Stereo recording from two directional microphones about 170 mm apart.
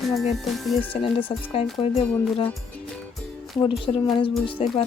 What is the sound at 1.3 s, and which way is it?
Music, 25° left (ahead or behind).